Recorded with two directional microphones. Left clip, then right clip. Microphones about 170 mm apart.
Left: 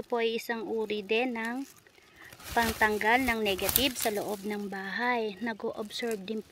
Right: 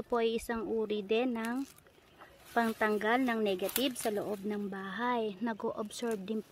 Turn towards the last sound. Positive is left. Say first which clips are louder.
# left 3 dB
turn(degrees=0)  # may be behind; listen again after turning